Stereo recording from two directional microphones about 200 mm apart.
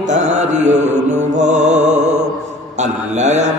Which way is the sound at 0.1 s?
35° right (ahead or behind).